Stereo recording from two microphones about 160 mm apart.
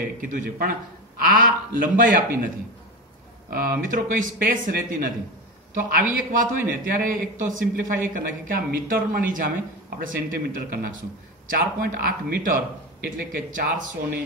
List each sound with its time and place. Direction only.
0.2 s a man's voice: 60° right (ahead or behind)
3.4 s a man's voice: 65° right (ahead or behind)